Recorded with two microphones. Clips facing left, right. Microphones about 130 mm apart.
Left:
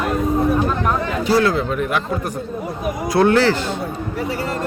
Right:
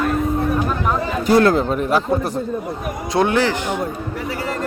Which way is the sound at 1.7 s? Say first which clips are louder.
Right 3 dB; 35° right (ahead or behind).